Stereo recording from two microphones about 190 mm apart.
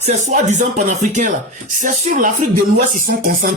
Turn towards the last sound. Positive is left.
turn(degrees=-50)  # may be behind; listen again after turning